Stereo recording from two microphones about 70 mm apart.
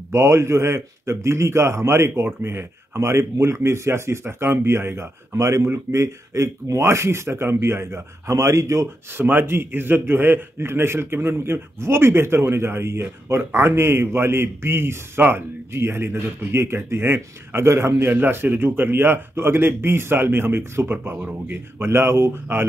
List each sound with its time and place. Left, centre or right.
0.1 s a man's voice: right
9.1 s a man's voice: right